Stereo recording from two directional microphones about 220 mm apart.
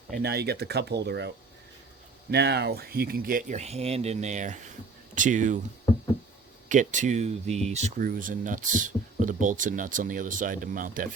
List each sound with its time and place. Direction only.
0.1 s speech: 45° right (ahead or behind)
2.3 s speech: 50° right (ahead or behind)
6.7 s speech: 35° right (ahead or behind)